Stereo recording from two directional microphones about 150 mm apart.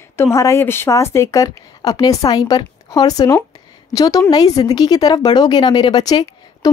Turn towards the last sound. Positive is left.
turn(degrees=25)  # may be behind; listen again after turning